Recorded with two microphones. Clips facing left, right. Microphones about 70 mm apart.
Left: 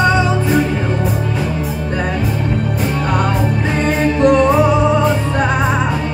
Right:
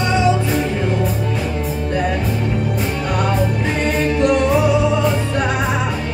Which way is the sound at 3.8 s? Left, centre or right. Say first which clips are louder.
Left 4 dB; left.